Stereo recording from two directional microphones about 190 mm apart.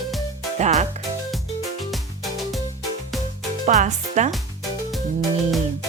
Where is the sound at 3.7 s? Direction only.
40° right (ahead or behind).